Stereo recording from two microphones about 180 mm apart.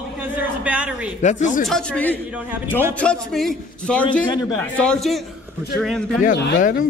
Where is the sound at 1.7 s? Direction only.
5° left (ahead or behind).